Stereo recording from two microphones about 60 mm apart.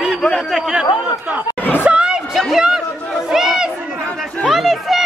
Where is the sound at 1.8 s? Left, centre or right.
Centre.